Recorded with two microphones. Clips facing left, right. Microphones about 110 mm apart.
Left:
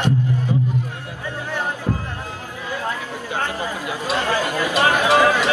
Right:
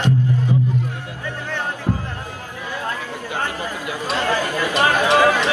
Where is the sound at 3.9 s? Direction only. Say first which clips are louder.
Right 1 dB; 15° left (ahead or behind).